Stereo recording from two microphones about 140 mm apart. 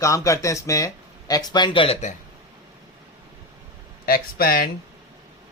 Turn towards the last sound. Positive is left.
turn(degrees=90)